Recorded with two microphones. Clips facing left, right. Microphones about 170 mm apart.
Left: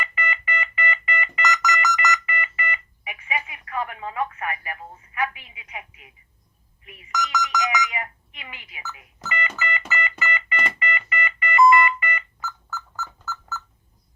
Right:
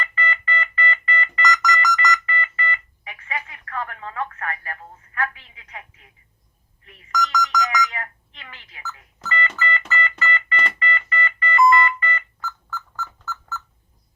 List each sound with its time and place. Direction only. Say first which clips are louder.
0.0 s a sound: right 2 dB; 10° left (ahead or behind)
9.2 s organ: right 3 dB; 10° left (ahead or behind)
11.7 s telephone dialing: even; 10° left (ahead or behind)